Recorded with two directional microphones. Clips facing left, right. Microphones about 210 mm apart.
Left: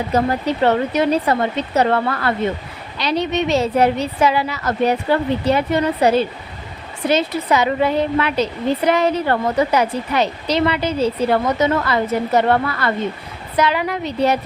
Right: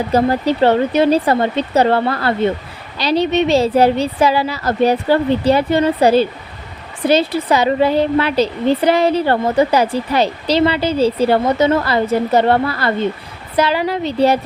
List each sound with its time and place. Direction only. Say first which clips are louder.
0.1 s a woman's voice: right 4 dB; 30° right (ahead or behind)